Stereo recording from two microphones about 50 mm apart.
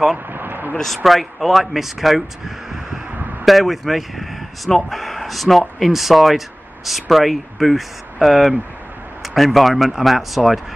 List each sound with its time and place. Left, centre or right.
0.3 s vehicle: right
0.7 s speech: centre